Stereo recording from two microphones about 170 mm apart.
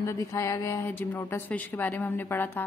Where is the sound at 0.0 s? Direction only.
20° left (ahead or behind).